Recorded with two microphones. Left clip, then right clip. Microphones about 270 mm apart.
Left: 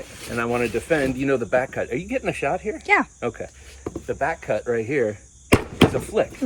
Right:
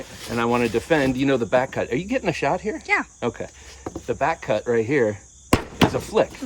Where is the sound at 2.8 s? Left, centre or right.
Centre.